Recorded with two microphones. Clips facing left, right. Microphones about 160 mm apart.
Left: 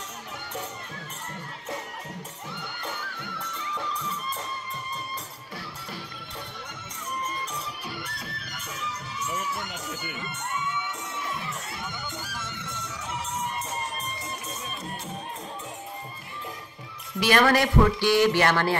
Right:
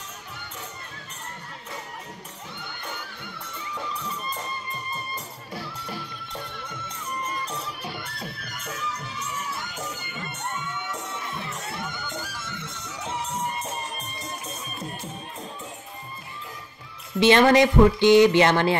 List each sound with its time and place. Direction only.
17.2 s speech: 25° right (ahead or behind)